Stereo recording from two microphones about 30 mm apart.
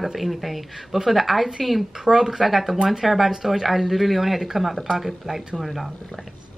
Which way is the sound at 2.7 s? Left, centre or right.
Centre.